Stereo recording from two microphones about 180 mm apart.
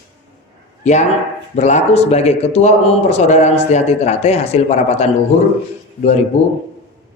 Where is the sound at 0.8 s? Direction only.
40° left (ahead or behind).